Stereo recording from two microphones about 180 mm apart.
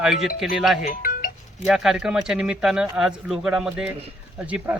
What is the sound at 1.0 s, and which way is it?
Music, 50° left (ahead or behind).